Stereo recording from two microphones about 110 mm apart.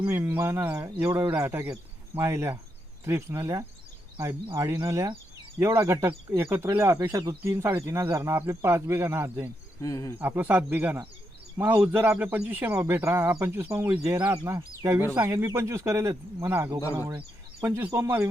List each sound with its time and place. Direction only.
0.1 s speech: 20° right (ahead or behind)
9.8 s speech: 30° left (ahead or behind)
10.2 s a man's voice: 15° right (ahead or behind)
14.5 s speech: 35° right (ahead or behind)
14.8 s speech: 20° right (ahead or behind)